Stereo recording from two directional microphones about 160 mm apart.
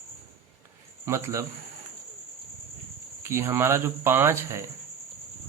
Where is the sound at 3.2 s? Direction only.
15° right (ahead or behind).